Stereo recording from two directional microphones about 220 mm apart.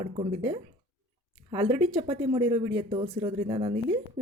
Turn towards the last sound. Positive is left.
turn(degrees=-25)  # may be behind; listen again after turning